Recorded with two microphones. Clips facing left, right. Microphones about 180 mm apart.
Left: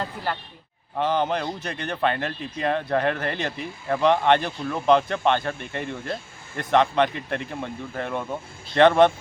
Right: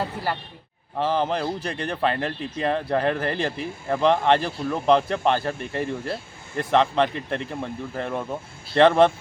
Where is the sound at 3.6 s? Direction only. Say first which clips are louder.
Left 1 dB; 5° right (ahead or behind).